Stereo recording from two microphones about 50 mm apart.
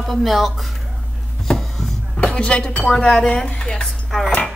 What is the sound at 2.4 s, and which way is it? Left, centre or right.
Speech, left.